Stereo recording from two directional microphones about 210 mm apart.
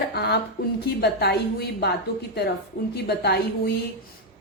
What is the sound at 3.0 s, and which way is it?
Speech, 50° left (ahead or behind).